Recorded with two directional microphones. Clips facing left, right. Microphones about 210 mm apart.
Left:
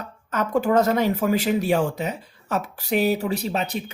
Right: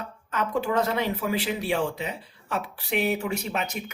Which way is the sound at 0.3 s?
45° left (ahead or behind).